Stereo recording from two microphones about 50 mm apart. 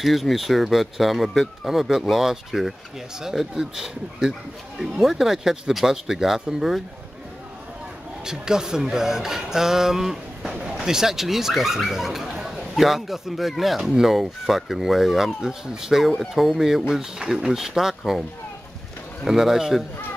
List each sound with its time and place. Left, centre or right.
0.0 s speech: centre
8.3 s speech: centre
19.2 s speech: centre